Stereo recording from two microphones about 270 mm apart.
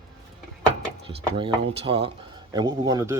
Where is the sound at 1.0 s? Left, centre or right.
Centre.